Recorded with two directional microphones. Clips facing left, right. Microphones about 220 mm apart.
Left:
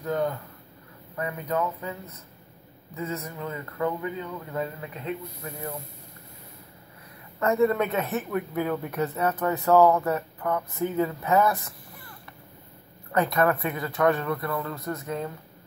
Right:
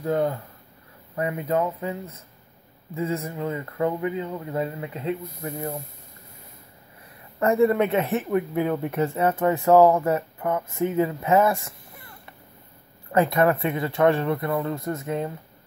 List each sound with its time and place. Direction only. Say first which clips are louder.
0.0 s speech: right 4 dB; 30° right (ahead or behind)
7.3 s speech: right 3 dB; 30° right (ahead or behind)